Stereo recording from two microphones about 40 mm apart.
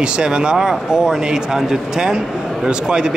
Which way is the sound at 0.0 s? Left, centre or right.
Right.